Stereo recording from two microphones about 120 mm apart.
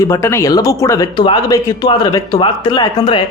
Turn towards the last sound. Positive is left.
turn(degrees=45)  # may be behind; listen again after turning